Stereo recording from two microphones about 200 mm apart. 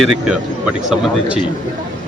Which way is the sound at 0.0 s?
Centre (ahead or behind).